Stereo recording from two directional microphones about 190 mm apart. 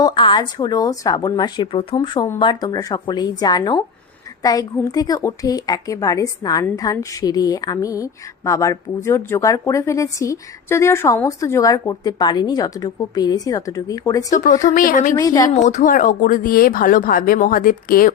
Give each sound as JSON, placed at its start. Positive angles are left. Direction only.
{"t": 0.0, "sound": "a woman's voice", "side_deg": 25}
{"t": 14.3, "sound": "speech", "side_deg": 40}
{"t": 15.1, "sound": "a woman's voice", "side_deg": 15}
{"t": 15.4, "sound": "speech", "side_deg": 40}